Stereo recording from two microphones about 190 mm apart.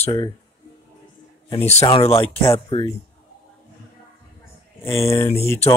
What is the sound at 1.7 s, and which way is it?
Speech, 30° left (ahead or behind).